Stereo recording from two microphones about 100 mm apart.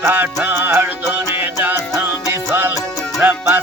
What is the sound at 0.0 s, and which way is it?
Music, 20° right (ahead or behind).